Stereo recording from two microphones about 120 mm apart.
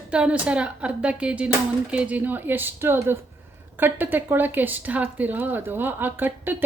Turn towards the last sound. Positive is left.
turn(degrees=-15)  # may be behind; listen again after turning